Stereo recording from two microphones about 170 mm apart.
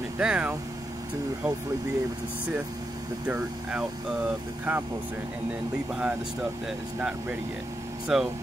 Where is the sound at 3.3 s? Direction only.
5° right (ahead or behind).